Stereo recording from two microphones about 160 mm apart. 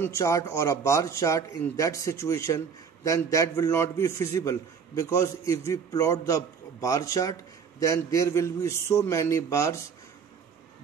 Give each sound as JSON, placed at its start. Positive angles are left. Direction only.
{"t": 0.0, "sound": "a man's voice", "side_deg": 20}